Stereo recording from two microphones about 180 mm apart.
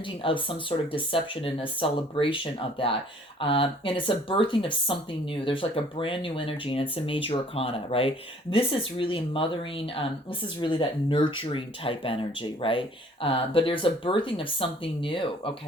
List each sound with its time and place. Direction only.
0.2 s speech: 30° left (ahead or behind)